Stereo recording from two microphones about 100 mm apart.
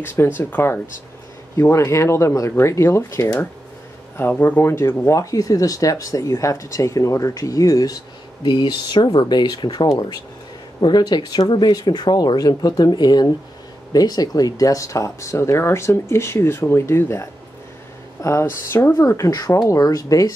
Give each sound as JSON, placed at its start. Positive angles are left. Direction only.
{"t": 0.0, "sound": "speech", "side_deg": 20}
{"t": 4.2, "sound": "speech", "side_deg": 15}
{"t": 8.5, "sound": "speech", "side_deg": 50}